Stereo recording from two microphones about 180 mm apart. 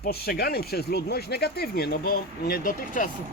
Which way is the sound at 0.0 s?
60° left (ahead or behind).